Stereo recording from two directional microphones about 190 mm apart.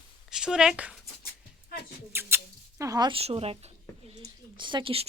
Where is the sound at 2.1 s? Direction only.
10° right (ahead or behind); by 4.2 s 30° right (ahead or behind).